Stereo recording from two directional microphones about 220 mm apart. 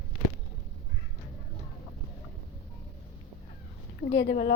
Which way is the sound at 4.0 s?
55° left (ahead or behind).